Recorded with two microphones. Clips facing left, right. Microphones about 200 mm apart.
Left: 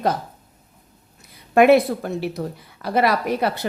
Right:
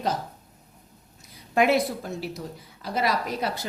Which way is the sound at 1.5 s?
60° left (ahead or behind).